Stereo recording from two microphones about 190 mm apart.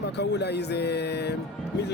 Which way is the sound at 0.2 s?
60° left (ahead or behind).